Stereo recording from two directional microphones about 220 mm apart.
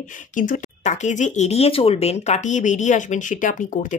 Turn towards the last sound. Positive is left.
turn(degrees=35)  # may be behind; listen again after turning